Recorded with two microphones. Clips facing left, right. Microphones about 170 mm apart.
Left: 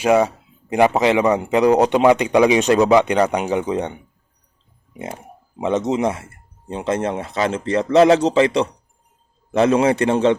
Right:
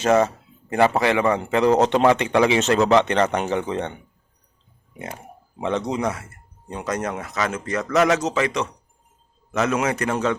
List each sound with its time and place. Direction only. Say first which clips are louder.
0.0 s speech: left 2 dB; 10° left (ahead or behind)
5.5 s speech: left 5 dB; 20° left (ahead or behind)